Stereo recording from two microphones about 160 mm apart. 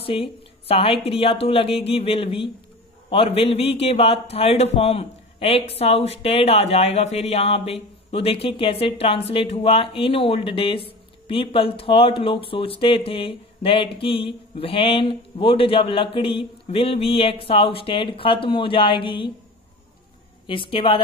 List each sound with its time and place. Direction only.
0.0 s a man's voice: 35° left (ahead or behind)
20.4 s a man's voice: 30° left (ahead or behind)